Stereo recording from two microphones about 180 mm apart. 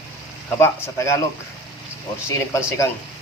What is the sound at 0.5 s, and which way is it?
Speech, 15° left (ahead or behind).